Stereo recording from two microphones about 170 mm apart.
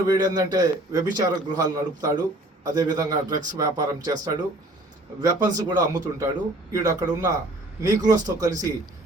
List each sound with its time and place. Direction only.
0.1 s a man's voice: 20° right (ahead or behind)